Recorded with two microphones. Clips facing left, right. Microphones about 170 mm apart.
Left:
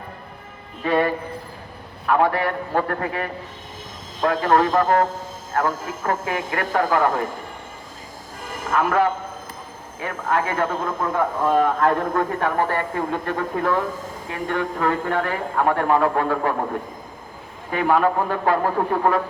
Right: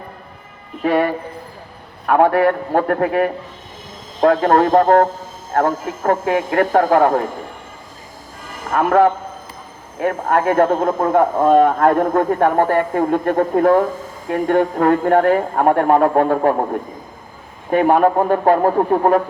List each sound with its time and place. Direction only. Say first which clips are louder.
2.0 s speech: right 6 dB; 55° right (ahead or behind)
4.2 s speech: right 5 dB; 45° right (ahead or behind)
8.7 s speech: right 6 dB; 50° right (ahead or behind)
17.7 s speech: right 6 dB; 45° right (ahead or behind)